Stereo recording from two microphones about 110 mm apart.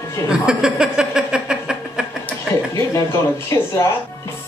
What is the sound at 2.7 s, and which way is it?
Speech, 25° left (ahead or behind).